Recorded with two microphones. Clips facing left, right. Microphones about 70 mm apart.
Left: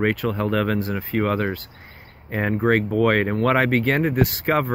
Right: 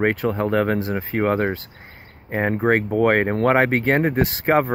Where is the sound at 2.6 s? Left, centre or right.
Right.